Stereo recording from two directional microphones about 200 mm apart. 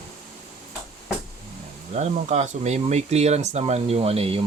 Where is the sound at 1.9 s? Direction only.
35° right (ahead or behind).